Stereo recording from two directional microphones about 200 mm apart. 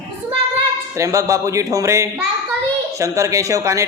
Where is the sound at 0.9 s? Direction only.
15° right (ahead or behind).